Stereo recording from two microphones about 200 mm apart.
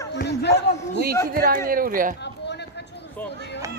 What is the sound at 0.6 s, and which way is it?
Speech, 60° left (ahead or behind).